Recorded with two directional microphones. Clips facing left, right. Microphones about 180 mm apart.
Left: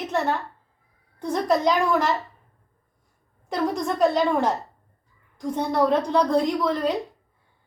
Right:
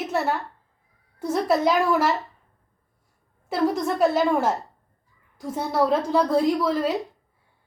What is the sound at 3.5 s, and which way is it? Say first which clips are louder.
A woman's voice: right 2 dB; 5° right (ahead or behind).